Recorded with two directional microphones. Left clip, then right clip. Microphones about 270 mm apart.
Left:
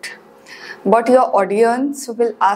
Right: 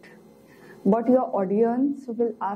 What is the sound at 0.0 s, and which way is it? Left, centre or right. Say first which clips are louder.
Speech: left 16 dB; centre.